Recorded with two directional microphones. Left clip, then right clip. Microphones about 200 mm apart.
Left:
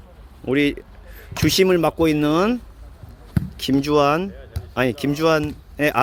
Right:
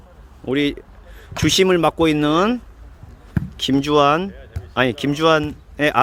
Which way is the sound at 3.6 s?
5° right (ahead or behind).